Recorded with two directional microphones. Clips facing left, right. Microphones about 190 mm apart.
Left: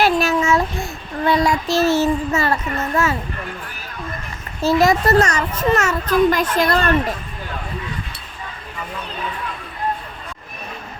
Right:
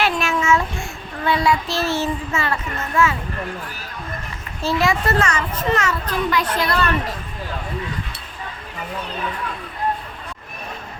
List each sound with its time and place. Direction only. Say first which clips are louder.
0.0 s child singing: left 4 dB; 35° left (ahead or behind)
4.6 s a child's voice: left 5 dB; 40° left (ahead or behind)